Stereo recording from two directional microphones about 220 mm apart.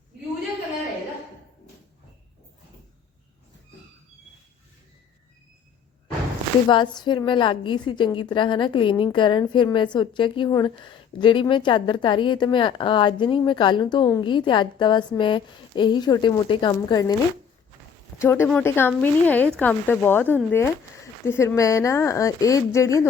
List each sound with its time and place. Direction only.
6.7 s a woman's voice: 20° left (ahead or behind)
18.2 s speech: 10° left (ahead or behind)